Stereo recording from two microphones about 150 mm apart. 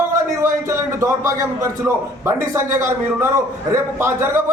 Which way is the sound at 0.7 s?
20° right (ahead or behind).